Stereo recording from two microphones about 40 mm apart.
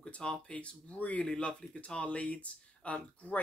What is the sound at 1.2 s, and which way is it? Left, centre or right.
Speech, left.